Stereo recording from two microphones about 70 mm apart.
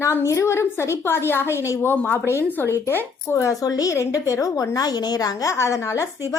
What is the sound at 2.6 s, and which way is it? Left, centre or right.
Speech, left.